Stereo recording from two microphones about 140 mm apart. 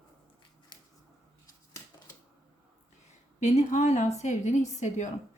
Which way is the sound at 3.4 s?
55° left (ahead or behind).